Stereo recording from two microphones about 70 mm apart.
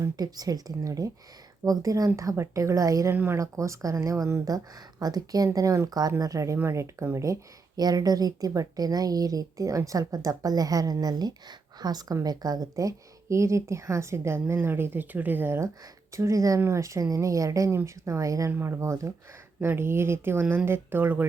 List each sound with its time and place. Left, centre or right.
0.0 s a woman's voice: right
2.3 s a woman's voice: right
4.4 s a woman's voice: right
5.5 s a woman's voice: right
6.6 s speech: right
7.8 s a woman's voice: right
16.1 s a woman's voice: right
16.6 s a woman's voice: right
19.5 s speech: right